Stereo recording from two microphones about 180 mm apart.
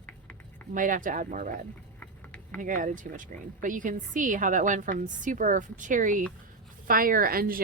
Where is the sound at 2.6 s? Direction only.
45° right (ahead or behind).